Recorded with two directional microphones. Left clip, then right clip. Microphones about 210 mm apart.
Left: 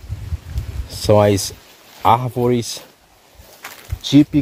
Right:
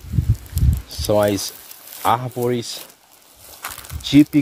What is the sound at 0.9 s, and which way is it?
Speech, 40° left (ahead or behind).